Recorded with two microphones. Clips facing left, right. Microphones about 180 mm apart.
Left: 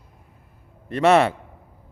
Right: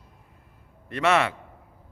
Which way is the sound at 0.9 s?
35° left (ahead or behind).